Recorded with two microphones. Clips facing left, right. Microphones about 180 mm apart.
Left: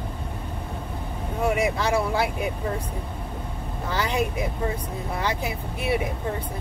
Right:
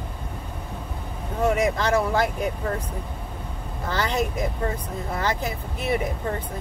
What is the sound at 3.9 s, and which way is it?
Speech, 10° left (ahead or behind).